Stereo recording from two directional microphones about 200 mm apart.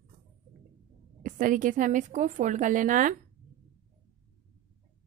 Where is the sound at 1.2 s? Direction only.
40° right (ahead or behind).